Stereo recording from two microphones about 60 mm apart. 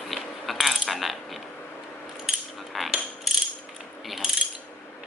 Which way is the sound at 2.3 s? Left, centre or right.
Centre.